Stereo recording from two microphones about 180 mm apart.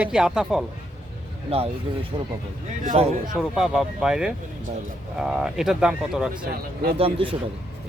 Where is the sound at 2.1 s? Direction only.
30° right (ahead or behind).